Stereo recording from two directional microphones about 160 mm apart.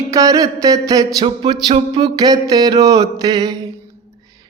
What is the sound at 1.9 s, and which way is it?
Mantra, 25° right (ahead or behind).